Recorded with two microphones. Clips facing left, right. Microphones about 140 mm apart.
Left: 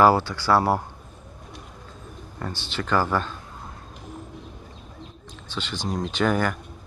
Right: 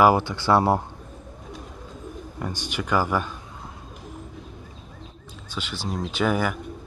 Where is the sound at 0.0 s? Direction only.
20° right (ahead or behind).